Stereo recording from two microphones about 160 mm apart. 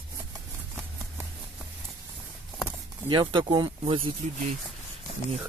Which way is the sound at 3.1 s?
30° right (ahead or behind).